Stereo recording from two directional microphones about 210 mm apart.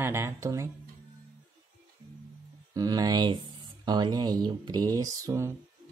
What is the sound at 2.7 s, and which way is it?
Speech, 20° right (ahead or behind).